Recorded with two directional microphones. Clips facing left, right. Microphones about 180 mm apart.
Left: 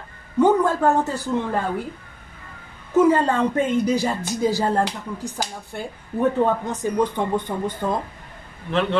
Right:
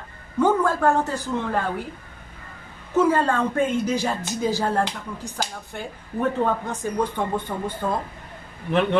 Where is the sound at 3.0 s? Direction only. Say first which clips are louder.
Left 3 dB; 15° left (ahead or behind).